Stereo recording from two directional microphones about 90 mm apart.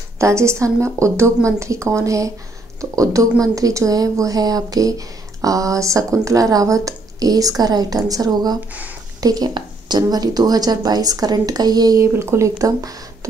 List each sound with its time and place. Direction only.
0.2 s speech: 30° right (ahead or behind)
12.2 s speech: 30° right (ahead or behind)